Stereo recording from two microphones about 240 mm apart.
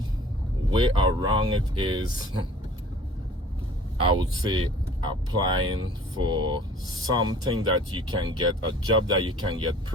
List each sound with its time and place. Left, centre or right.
0.7 s speech: centre
4.0 s speech: centre